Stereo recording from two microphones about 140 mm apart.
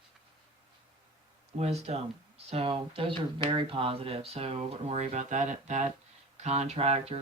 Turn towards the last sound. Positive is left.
turn(degrees=-50)  # may be behind; listen again after turning